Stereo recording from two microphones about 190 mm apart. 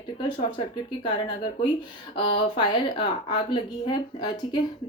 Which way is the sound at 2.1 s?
25° left (ahead or behind).